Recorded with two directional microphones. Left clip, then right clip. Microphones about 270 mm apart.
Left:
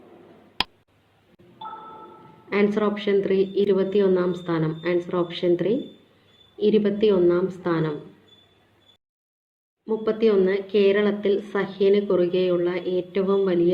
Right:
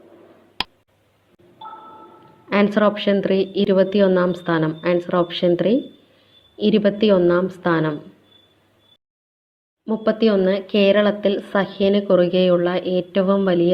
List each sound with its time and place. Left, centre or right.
0.6 s tick: centre
1.5 s a sound: centre
2.5 s a woman's voice: right
9.8 s a woman's voice: right